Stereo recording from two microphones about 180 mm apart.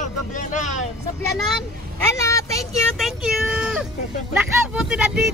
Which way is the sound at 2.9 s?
Centre (ahead or behind).